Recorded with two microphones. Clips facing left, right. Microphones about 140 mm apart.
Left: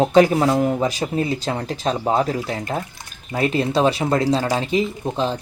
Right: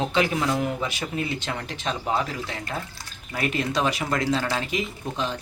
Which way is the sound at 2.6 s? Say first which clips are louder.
Left 6 dB; 20° left (ahead or behind).